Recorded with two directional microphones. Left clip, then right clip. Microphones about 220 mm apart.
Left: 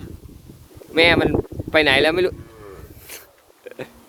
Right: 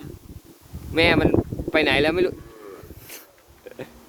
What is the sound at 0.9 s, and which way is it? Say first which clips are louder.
Speech: left 3 dB; 15° left (ahead or behind).